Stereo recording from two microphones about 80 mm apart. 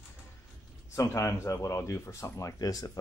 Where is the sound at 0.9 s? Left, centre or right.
Left.